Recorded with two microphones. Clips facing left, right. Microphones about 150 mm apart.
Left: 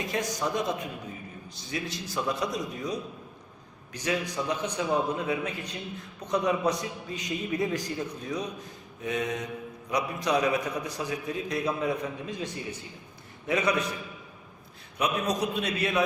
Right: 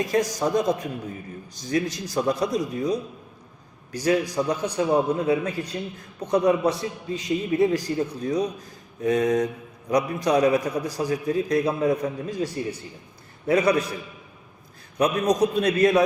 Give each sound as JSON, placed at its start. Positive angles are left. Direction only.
{"t": 0.0, "sound": "a man's voice", "side_deg": -35}
{"t": 13.5, "sound": "a man's voice", "side_deg": -35}
{"t": 14.9, "sound": "a man's voice", "side_deg": -40}